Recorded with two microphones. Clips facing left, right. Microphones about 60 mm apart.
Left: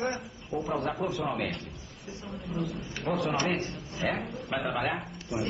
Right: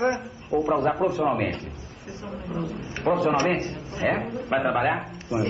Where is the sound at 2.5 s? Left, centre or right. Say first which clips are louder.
Right 2 dB; right.